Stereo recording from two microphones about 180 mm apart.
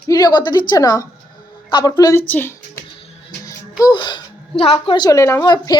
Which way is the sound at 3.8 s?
25° left (ahead or behind).